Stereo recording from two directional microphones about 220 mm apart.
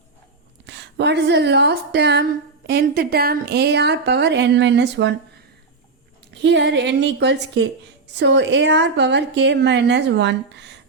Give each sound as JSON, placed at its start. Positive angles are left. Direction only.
{"t": 0.6, "sound": "a woman's voice", "side_deg": -50}
{"t": 6.3, "sound": "a woman's voice", "side_deg": -50}